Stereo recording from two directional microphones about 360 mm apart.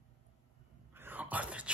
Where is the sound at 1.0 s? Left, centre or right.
Centre.